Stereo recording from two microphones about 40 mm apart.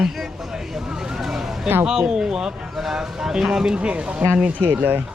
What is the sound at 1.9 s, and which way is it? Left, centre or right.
Speech, centre.